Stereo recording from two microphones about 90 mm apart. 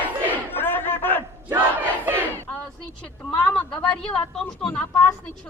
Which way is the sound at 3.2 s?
15° left (ahead or behind).